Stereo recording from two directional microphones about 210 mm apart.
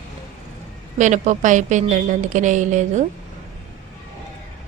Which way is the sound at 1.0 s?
35° right (ahead or behind).